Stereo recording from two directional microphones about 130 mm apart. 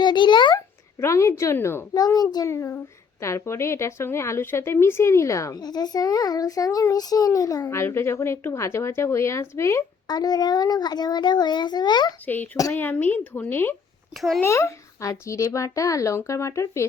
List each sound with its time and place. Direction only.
0.0 s a sound: 35° left (ahead or behind)
0.5 s a child's voice: 20° left (ahead or behind)
2.0 s a child's voice: 30° left (ahead or behind)
12.2 s a woman's voice: 15° left (ahead or behind)
12.5 s a child's voice: 25° left (ahead or behind)
12.8 s a woman's voice: 15° left (ahead or behind)
14.2 s a child's voice: centre (ahead or behind)
14.4 s a child's voice: 25° left (ahead or behind)